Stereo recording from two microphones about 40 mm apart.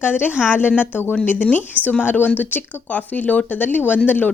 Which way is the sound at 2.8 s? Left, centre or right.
Left.